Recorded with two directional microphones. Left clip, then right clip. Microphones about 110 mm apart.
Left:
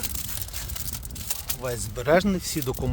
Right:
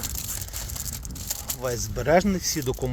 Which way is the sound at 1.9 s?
40° left (ahead or behind).